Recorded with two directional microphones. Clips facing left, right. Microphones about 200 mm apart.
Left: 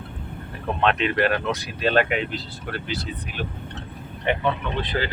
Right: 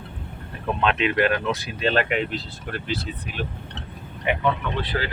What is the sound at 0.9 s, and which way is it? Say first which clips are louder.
Speech: even; 40° left (ahead or behind).